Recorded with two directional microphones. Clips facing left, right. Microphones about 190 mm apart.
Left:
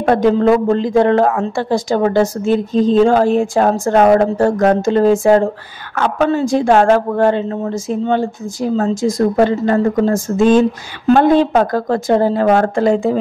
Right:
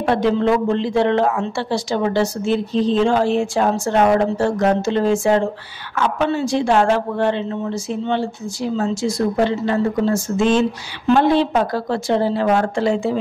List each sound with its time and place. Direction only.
0.0 s speech: 45° left (ahead or behind)